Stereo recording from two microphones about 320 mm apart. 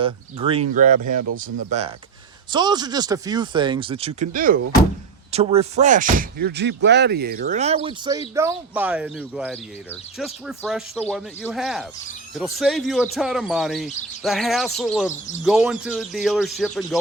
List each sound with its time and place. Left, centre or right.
0.0 s speech: centre
2.5 s speech: centre